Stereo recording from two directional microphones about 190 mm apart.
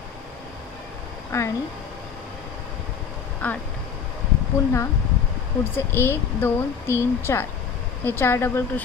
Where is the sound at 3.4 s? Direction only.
5° left (ahead or behind).